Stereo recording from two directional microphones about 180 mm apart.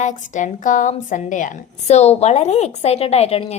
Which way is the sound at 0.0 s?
40° left (ahead or behind).